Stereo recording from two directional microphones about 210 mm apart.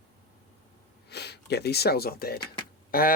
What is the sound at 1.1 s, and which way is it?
Speech, 50° left (ahead or behind).